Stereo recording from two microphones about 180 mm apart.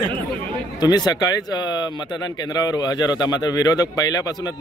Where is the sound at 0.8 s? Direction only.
20° left (ahead or behind).